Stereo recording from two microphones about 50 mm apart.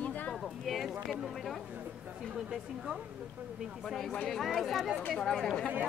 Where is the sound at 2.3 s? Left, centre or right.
Centre.